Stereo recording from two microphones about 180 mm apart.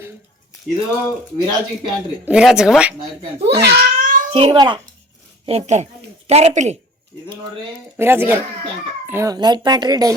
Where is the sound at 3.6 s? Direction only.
55° right (ahead or behind).